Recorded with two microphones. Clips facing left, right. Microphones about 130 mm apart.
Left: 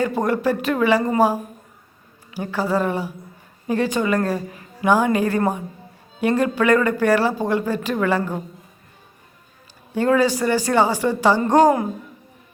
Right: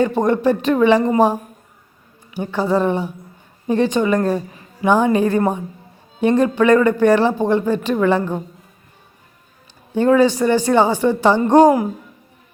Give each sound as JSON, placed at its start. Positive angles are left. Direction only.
{"t": 0.0, "sound": "a woman's voice", "side_deg": -20}
{"t": 2.3, "sound": "a woman's voice", "side_deg": -20}
{"t": 9.9, "sound": "speech", "side_deg": -20}